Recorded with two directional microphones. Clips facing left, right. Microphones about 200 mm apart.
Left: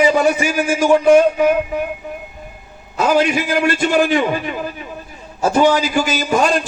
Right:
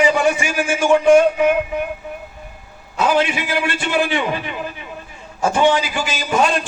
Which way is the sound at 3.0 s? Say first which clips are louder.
Left 3 dB; 40° left (ahead or behind).